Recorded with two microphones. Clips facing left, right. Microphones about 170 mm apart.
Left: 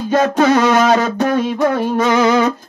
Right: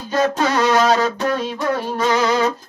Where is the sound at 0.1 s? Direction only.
55° left (ahead or behind).